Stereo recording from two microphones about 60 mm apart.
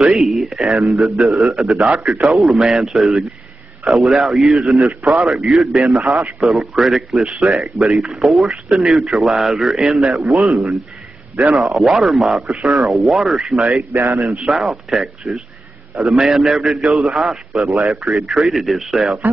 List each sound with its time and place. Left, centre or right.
0.0 s a man's voice: centre
13.9 s speech: right
14.2 s a man's voice: centre